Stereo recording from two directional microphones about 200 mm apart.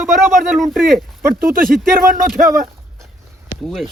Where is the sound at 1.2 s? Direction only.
10° right (ahead or behind).